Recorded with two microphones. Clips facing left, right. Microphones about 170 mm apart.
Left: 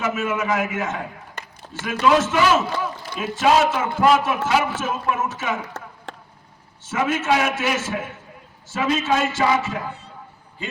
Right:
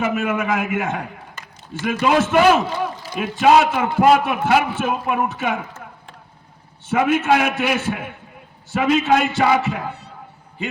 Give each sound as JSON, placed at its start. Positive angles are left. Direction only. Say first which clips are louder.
{"t": 0.0, "sound": "a man's voice", "louder": "right 3 dB", "side_deg": -55}
{"t": 5.6, "sound": "a sound", "louder": "left 3 dB", "side_deg": 75}
{"t": 6.8, "sound": "a man's voice", "louder": "right 4 dB", "side_deg": -60}